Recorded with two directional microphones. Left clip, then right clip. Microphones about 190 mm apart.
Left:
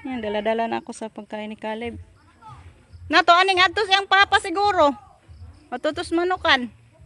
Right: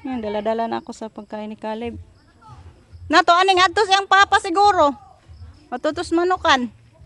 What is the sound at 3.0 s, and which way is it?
A woman's voice, 15° right (ahead or behind).